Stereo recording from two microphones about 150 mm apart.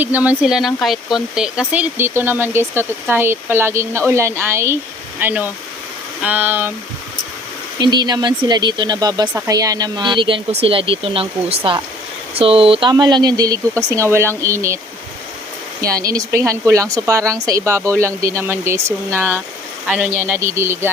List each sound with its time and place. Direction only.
0.0 s speech: 10° right (ahead or behind)
7.8 s speech: 30° right (ahead or behind)
15.8 s speech: 25° right (ahead or behind)